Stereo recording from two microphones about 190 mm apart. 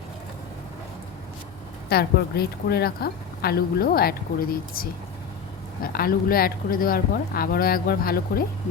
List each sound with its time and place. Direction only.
1.9 s a woman's voice: 55° left (ahead or behind)